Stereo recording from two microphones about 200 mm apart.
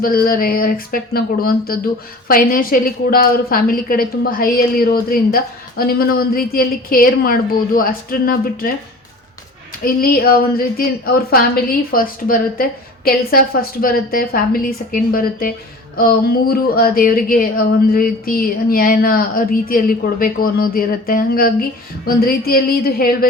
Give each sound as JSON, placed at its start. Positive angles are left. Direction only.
{"t": 0.0, "sound": "a woman's voice", "side_deg": 45}
{"t": 9.8, "sound": "a woman's voice", "side_deg": 50}